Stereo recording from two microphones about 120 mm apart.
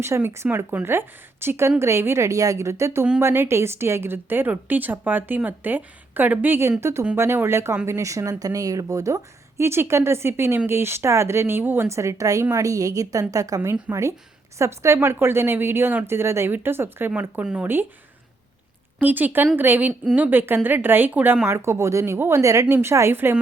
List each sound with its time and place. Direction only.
0.0 s a woman's voice: 20° right (ahead or behind)
18.9 s a woman's voice: 15° right (ahead or behind)